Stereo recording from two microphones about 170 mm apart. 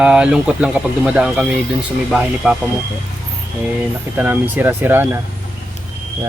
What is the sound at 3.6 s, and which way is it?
Speech, 10° right (ahead or behind).